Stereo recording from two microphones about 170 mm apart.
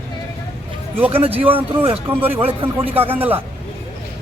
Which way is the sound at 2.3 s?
35° right (ahead or behind).